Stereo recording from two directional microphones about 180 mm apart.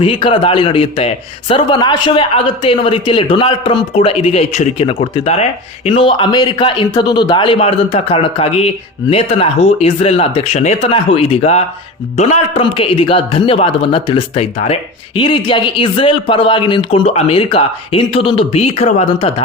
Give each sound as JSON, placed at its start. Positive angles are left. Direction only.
{"t": 0.0, "sound": "speech", "side_deg": 30}